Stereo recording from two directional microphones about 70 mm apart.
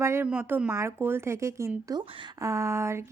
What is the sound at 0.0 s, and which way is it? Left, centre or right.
Speech, right.